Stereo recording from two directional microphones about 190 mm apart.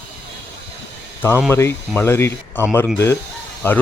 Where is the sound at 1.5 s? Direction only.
10° left (ahead or behind).